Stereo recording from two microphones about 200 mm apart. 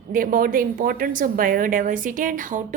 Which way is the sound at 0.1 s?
45° right (ahead or behind).